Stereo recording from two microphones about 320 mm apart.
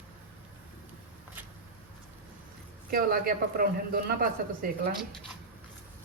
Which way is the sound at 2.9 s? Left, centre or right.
Right.